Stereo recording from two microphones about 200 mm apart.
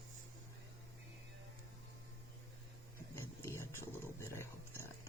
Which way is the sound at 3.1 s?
10° left (ahead or behind).